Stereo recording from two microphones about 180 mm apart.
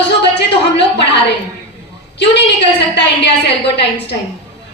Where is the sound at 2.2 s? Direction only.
75° left (ahead or behind).